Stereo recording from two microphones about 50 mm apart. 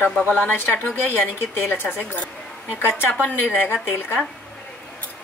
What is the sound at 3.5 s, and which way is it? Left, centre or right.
Speech, left.